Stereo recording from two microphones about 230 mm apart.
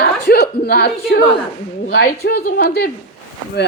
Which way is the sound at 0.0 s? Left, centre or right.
Left.